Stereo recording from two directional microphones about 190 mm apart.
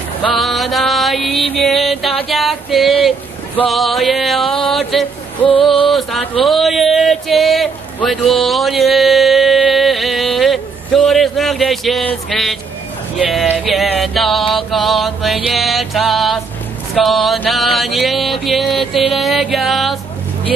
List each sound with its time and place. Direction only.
0.2 s music: centre (ahead or behind)
1.3 s music: 30° left (ahead or behind)
1.6 s music: centre (ahead or behind)
2.2 s a sound: centre (ahead or behind)
4.9 s mantra: centre (ahead or behind)
6.4 s a sound: centre (ahead or behind)
13.3 s mantra: centre (ahead or behind)